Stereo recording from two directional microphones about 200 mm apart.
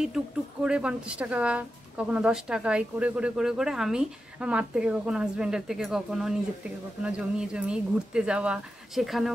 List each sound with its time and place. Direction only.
0.7 s speech: 5° right (ahead or behind)